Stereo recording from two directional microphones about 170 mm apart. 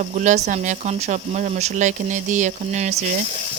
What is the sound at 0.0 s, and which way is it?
Speech, 45° right (ahead or behind).